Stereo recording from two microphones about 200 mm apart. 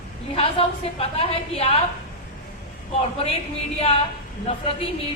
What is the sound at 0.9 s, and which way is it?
Speech, 30° left (ahead or behind).